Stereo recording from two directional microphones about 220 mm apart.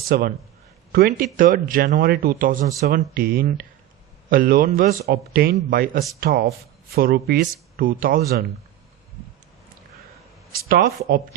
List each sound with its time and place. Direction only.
0.1 s a man's voice: 40° right (ahead or behind)
10.7 s a man's voice: 40° right (ahead or behind)